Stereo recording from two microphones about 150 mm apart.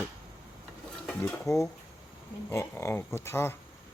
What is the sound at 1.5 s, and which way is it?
Speech, 20° left (ahead or behind).